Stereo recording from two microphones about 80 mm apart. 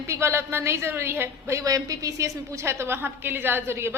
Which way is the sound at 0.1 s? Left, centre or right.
Right.